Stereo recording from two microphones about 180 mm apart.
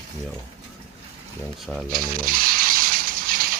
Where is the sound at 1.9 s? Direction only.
55° right (ahead or behind).